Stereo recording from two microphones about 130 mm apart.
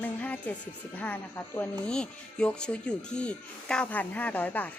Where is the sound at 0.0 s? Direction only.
10° left (ahead or behind).